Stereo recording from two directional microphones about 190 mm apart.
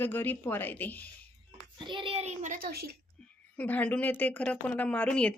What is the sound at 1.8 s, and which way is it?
A child's voice, 25° right (ahead or behind).